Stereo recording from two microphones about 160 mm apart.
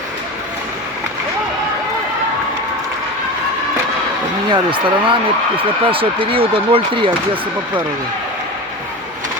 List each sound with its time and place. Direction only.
4.5 s speech: 30° right (ahead or behind)